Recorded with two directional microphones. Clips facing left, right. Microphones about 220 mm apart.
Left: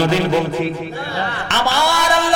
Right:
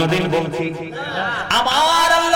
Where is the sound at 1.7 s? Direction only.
10° left (ahead or behind).